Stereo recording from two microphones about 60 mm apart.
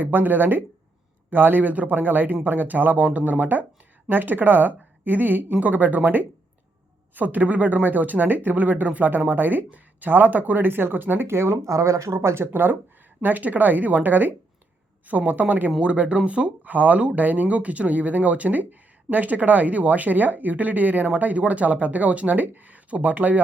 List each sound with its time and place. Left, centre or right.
0.0 s speech: right
13.2 s speech: right